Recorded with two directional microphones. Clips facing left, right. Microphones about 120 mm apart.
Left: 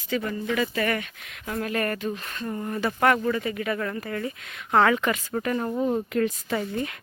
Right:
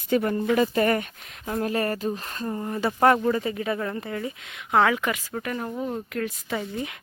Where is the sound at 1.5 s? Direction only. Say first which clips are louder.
Right 2 dB; 25° right (ahead or behind).